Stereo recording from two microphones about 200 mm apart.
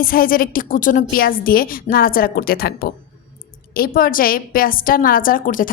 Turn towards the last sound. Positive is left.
turn(degrees=45)  # may be behind; listen again after turning